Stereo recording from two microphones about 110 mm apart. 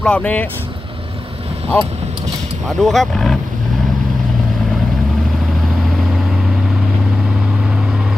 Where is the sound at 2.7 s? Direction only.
Centre (ahead or behind).